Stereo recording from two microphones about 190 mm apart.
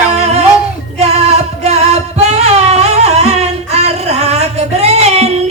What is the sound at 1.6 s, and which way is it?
Music, 35° right (ahead or behind).